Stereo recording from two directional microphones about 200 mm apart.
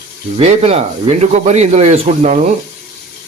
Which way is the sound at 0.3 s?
30° right (ahead or behind).